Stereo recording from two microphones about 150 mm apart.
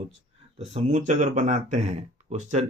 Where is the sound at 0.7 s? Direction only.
55° right (ahead or behind).